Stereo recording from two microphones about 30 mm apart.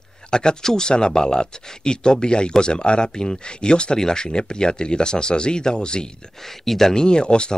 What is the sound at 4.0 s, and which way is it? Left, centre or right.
Speech, centre.